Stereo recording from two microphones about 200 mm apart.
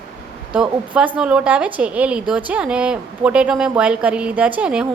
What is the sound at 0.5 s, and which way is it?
A woman's voice, 5° right (ahead or behind).